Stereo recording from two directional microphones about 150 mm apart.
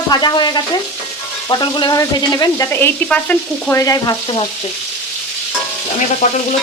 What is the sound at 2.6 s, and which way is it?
Frying, 10° left (ahead or behind).